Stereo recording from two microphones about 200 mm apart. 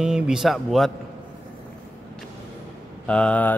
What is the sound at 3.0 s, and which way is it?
Speech, 5° left (ahead or behind).